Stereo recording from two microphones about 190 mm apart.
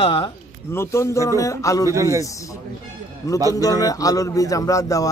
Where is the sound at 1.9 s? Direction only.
15° right (ahead or behind).